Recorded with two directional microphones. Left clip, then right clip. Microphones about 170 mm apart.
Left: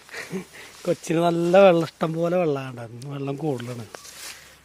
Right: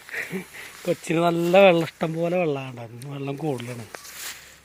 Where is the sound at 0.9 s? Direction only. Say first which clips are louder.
Even; 15° left (ahead or behind).